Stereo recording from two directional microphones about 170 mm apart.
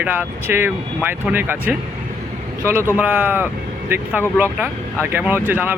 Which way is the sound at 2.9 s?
10° right (ahead or behind).